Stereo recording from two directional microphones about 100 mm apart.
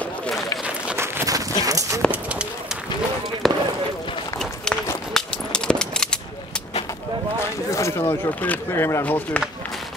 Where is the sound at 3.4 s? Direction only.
Centre (ahead or behind).